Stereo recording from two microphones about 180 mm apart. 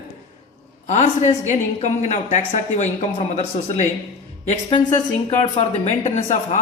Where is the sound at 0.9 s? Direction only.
40° left (ahead or behind).